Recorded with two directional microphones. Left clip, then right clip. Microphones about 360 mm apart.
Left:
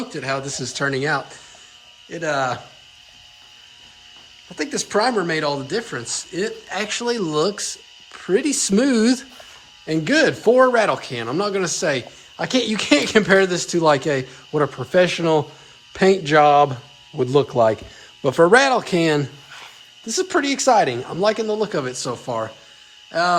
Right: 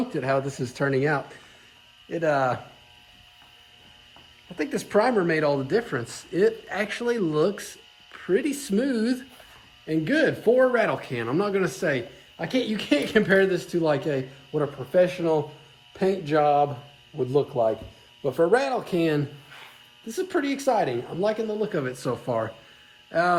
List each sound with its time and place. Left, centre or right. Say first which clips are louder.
0.1 s speech: left 2 dB; centre
4.4 s a man's voice: left 4 dB; centre